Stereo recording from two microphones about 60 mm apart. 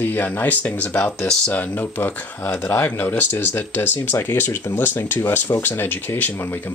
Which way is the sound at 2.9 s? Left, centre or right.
Left.